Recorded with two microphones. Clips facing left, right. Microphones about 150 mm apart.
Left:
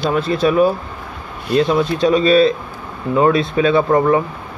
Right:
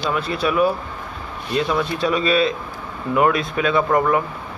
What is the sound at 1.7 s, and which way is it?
Speech, 25° left (ahead or behind).